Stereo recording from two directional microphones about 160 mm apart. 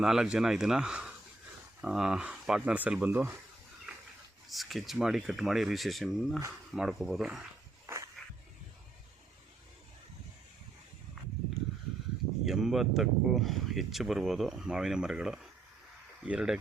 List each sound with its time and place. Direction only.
0.0 s speech: 5° right (ahead or behind)
4.4 s speech: centre (ahead or behind)
7.9 s a sound: 20° right (ahead or behind)
12.5 s speech: centre (ahead or behind)